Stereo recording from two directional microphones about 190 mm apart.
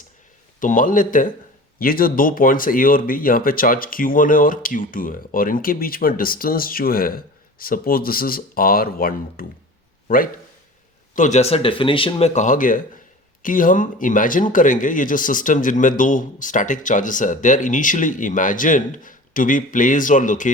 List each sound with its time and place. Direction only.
0.6 s speech: 45° left (ahead or behind)
11.1 s speech: 40° left (ahead or behind)